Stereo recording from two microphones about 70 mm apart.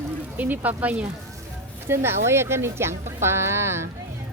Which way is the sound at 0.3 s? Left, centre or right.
Right.